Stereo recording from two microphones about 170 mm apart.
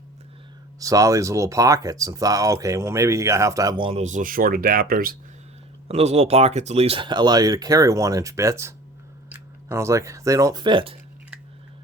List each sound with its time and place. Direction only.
0.8 s speech: 20° right (ahead or behind)
4.0 s speech: 50° right (ahead or behind)
5.9 s speech: 40° right (ahead or behind)